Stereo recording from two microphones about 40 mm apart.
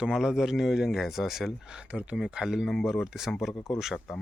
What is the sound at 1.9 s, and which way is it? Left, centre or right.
Speech, right.